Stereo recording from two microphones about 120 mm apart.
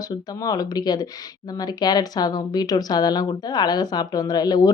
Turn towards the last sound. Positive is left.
turn(degrees=35)  # may be behind; listen again after turning